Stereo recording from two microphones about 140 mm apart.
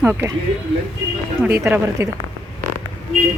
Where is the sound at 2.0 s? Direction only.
20° right (ahead or behind).